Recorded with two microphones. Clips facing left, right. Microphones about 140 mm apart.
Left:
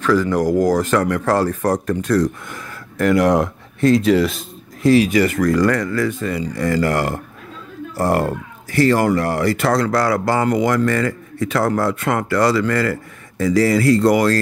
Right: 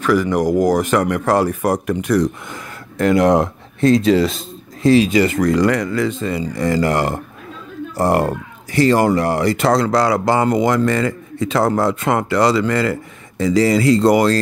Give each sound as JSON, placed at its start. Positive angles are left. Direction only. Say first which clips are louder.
{"t": 0.0, "sound": "speech", "louder": "right 1 dB", "side_deg": -15}